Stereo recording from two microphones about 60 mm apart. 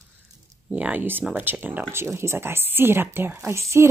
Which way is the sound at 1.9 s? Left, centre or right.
Right.